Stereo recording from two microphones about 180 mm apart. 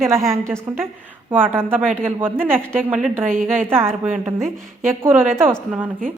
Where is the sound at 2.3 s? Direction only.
5° left (ahead or behind).